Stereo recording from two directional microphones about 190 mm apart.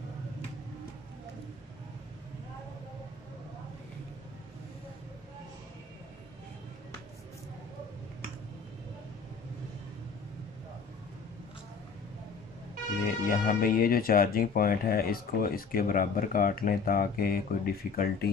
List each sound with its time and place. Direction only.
13.0 s speech: 45° left (ahead or behind)